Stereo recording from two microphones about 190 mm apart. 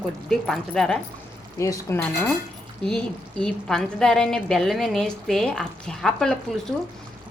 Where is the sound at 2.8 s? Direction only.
5° left (ahead or behind).